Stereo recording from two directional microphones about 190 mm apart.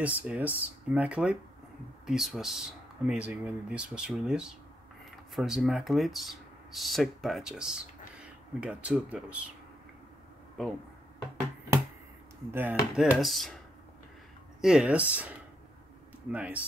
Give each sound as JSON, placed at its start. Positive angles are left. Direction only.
{"t": 0.0, "sound": "speech", "side_deg": -10}
{"t": 12.4, "sound": "speech", "side_deg": -10}
{"t": 14.6, "sound": "speech", "side_deg": -5}